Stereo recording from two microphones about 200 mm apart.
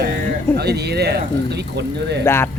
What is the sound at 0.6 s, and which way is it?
Speech, 55° right (ahead or behind).